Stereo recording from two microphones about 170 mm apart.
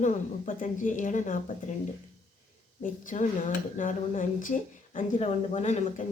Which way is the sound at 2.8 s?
50° left (ahead or behind).